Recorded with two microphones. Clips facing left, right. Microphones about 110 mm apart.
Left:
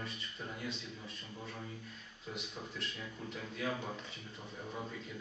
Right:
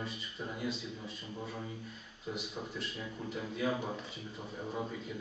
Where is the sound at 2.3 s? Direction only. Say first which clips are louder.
Right 5 dB; 10° right (ahead or behind).